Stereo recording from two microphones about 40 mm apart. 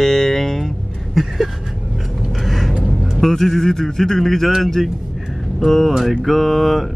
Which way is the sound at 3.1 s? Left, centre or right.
Centre.